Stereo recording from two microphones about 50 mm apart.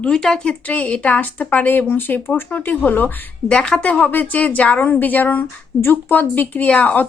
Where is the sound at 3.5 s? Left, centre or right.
Centre.